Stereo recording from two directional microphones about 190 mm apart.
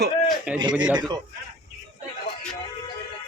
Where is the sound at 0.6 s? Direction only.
25° right (ahead or behind).